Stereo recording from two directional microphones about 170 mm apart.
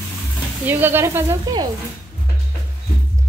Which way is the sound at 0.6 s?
10° right (ahead or behind).